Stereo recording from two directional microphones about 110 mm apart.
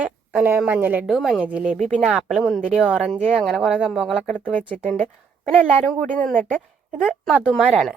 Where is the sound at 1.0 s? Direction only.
Centre (ahead or behind).